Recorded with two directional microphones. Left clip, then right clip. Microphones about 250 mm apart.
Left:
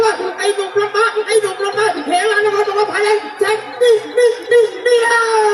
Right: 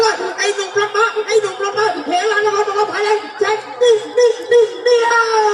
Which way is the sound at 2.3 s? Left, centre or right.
Left.